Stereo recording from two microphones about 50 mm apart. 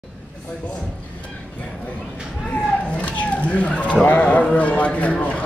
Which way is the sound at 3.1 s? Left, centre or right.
Left.